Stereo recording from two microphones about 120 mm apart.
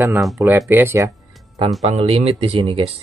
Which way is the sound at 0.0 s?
20° right (ahead or behind).